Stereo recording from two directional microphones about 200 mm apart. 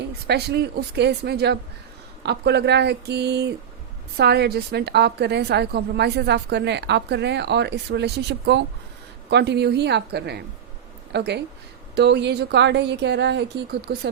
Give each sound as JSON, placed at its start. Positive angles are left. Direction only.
{"t": 0.0, "sound": "a woman's voice", "side_deg": -55}